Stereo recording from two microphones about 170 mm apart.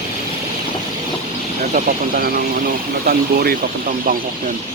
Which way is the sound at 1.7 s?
55° right (ahead or behind).